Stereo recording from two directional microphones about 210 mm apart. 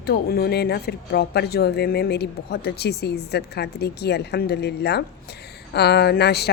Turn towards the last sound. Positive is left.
turn(degrees=50)  # may be behind; listen again after turning